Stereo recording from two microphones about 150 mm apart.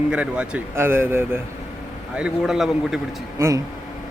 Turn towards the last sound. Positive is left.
turn(degrees=-20)  # may be behind; listen again after turning